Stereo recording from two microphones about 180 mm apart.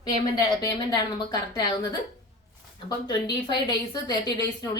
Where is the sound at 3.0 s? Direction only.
20° left (ahead or behind).